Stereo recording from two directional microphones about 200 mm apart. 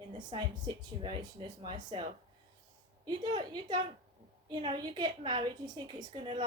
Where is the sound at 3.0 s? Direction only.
20° right (ahead or behind).